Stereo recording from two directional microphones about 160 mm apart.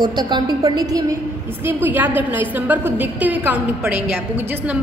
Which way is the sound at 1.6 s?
15° right (ahead or behind).